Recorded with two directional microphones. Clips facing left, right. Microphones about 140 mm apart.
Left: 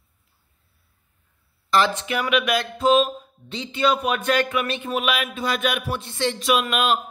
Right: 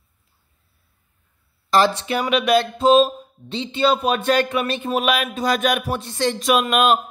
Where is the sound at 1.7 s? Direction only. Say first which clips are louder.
Right 3 dB; 35° right (ahead or behind).